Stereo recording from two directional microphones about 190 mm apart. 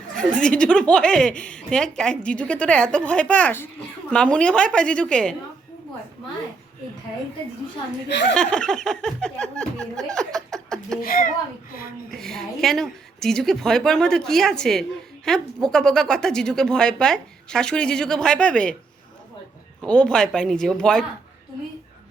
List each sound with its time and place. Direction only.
0.2 s a woman's voice: 5° left (ahead or behind)
8.3 s a woman's voice: 5° left (ahead or behind)
11.0 s a child's voice: 50° left (ahead or behind)
12.1 s a woman's voice: centre (ahead or behind)
19.8 s a woman's voice: 5° left (ahead or behind)